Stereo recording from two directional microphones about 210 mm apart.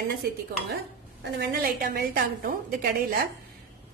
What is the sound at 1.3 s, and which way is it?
Speech, 45° right (ahead or behind).